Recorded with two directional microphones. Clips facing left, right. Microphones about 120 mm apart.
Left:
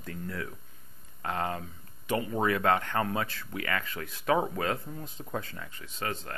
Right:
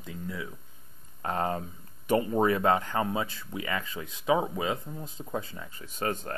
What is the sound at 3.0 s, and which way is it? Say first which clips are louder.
Speech: right 1 dB; 20° right (ahead or behind).